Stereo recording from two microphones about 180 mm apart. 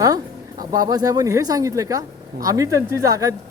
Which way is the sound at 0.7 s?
20° right (ahead or behind).